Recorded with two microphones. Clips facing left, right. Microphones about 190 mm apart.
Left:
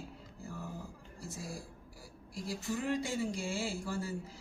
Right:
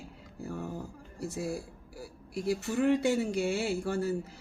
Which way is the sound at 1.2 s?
65° right (ahead or behind).